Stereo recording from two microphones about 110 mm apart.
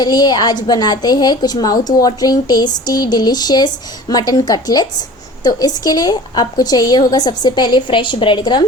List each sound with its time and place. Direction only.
0.0 s a woman's voice: 40° left (ahead or behind)